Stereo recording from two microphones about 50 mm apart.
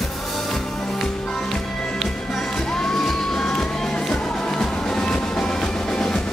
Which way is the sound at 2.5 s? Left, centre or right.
Centre.